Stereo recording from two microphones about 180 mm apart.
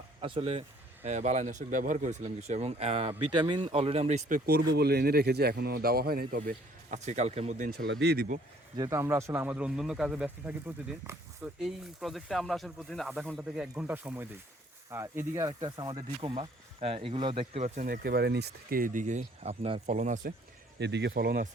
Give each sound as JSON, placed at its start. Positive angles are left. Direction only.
{"t": 0.2, "sound": "speech", "side_deg": -30}
{"t": 4.7, "sound": "speech", "side_deg": -65}
{"t": 8.0, "sound": "speech", "side_deg": -60}
{"t": 8.8, "sound": "speech", "side_deg": -15}
{"t": 15.6, "sound": "speech", "side_deg": -25}
{"t": 17.7, "sound": "speech", "side_deg": -60}
{"t": 20.7, "sound": "speech", "side_deg": -70}